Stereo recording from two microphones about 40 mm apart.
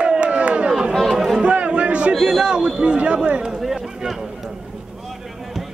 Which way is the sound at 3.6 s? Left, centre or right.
Centre.